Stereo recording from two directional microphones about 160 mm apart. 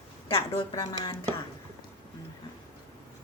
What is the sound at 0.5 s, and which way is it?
Speech, 20° left (ahead or behind).